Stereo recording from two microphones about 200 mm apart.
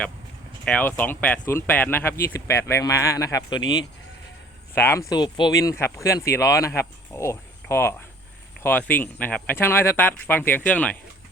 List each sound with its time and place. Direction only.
0.6 s speech: 5° left (ahead or behind)
4.7 s speech: 15° left (ahead or behind)